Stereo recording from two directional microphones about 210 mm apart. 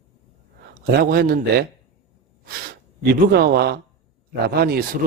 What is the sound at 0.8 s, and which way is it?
Speech, 50° right (ahead or behind).